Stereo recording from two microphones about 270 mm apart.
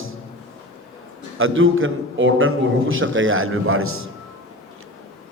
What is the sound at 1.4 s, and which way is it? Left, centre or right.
A man's voice, right.